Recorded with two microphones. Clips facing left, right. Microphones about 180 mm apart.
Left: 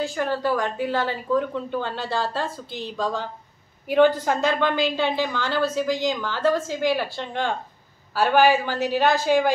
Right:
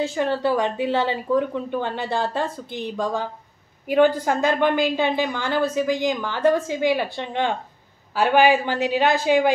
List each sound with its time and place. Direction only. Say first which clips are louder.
0.0 s speech: right 2 dB; 20° right (ahead or behind)